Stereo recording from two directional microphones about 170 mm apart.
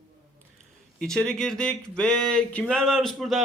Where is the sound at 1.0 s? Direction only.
5° left (ahead or behind).